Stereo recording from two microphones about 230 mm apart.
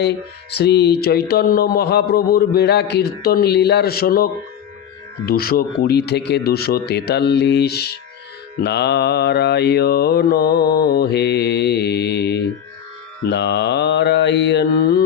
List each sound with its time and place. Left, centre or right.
0.5 s mantra: left